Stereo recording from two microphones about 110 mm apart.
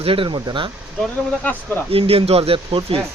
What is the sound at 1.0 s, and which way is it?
Speech, 15° left (ahead or behind).